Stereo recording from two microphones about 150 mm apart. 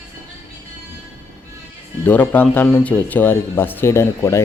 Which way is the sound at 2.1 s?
10° left (ahead or behind).